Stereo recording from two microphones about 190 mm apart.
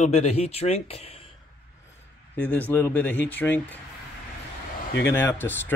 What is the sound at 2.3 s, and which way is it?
Speech, 10° left (ahead or behind).